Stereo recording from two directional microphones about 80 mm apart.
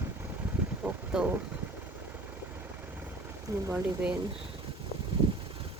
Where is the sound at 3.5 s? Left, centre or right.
Right.